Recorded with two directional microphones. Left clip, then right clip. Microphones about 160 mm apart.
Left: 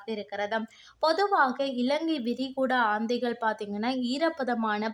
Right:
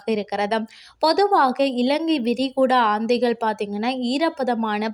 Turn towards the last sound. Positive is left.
turn(degrees=-25)  # may be behind; listen again after turning